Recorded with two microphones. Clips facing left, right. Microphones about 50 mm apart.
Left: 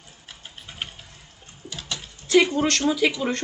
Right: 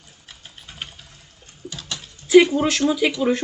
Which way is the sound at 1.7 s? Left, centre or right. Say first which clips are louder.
Even; centre.